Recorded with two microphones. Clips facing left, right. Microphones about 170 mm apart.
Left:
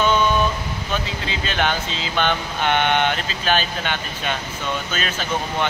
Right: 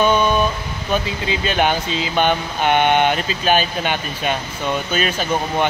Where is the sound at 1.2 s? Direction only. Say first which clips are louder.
Right 4 dB; 15° right (ahead or behind).